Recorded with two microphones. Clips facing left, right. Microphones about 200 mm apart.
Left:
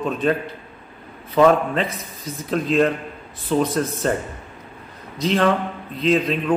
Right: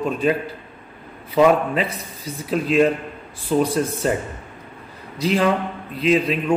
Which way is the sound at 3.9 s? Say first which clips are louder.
Even; centre (ahead or behind).